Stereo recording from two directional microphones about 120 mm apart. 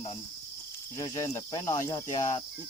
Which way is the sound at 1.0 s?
30° left (ahead or behind).